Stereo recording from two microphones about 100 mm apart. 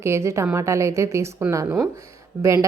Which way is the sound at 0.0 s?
25° right (ahead or behind).